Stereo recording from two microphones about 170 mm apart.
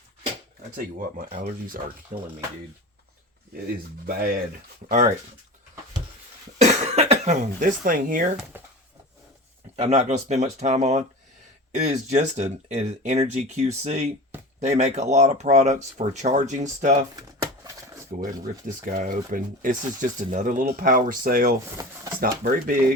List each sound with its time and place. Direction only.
0.8 s speech: 55° right (ahead or behind)
4.0 s speech: 60° right (ahead or behind)
6.6 s speech: 40° right (ahead or behind)
8.5 s a sound: 10° right (ahead or behind)
9.7 s speech: 35° right (ahead or behind)
17.2 s a sound: 20° right (ahead or behind)
18.1 s speech: 50° right (ahead or behind)
21.8 s speech: 20° right (ahead or behind)
22.2 s speech: 55° right (ahead or behind)